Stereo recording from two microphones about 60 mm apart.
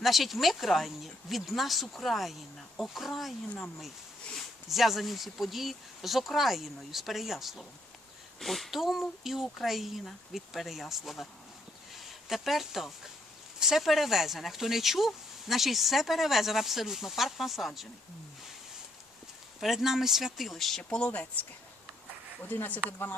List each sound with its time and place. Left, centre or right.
0.0 s speech: centre
19.5 s speech: centre
20.9 s speech: left
22.4 s speech: left